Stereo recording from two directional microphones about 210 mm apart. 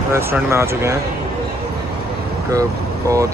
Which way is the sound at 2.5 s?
15° right (ahead or behind).